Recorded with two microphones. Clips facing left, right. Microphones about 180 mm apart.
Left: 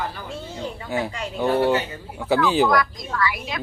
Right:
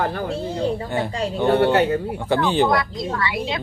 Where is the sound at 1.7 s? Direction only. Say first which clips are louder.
Right 5 dB; 60° right (ahead or behind).